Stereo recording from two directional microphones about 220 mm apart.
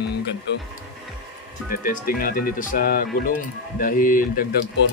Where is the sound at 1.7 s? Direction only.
40° left (ahead or behind).